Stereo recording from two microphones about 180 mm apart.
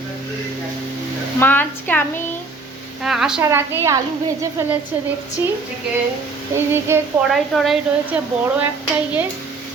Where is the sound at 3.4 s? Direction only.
15° right (ahead or behind).